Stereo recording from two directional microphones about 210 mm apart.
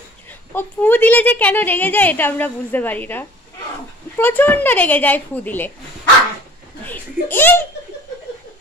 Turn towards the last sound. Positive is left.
turn(degrees=10)  # may be behind; listen again after turning